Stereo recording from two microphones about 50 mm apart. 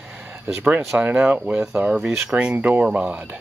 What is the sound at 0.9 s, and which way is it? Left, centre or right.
Speech, right.